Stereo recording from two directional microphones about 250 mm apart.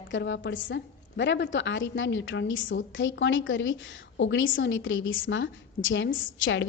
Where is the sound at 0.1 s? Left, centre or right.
Left.